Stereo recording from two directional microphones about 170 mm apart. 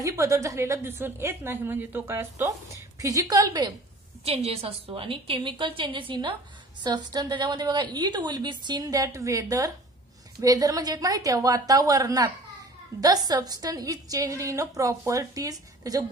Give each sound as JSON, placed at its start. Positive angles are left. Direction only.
{"t": 0.0, "sound": "a woman's voice", "side_deg": -20}
{"t": 4.2, "sound": "a woman's voice", "side_deg": -35}